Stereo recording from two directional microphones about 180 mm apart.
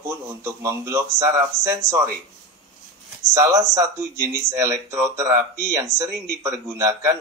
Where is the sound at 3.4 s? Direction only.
15° right (ahead or behind).